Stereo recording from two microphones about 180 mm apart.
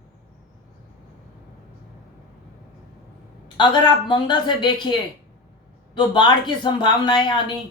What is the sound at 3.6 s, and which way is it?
A woman's voice, 25° left (ahead or behind).